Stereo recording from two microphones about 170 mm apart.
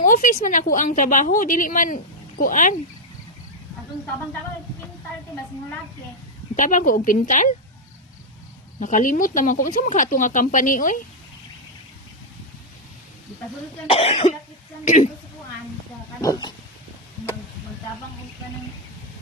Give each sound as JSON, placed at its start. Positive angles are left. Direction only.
{"t": 0.0, "sound": "speech", "side_deg": 50}
{"t": 6.6, "sound": "speech", "side_deg": 50}
{"t": 8.8, "sound": "speech", "side_deg": 50}
{"t": 13.8, "sound": "cough", "side_deg": 35}
{"t": 14.8, "sound": "speech", "side_deg": 45}
{"t": 16.2, "sound": "speech", "side_deg": 25}